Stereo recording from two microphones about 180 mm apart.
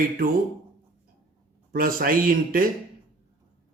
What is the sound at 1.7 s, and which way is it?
Speech, 55° right (ahead or behind).